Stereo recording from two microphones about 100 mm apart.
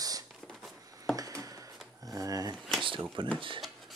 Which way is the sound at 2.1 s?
35° right (ahead or behind).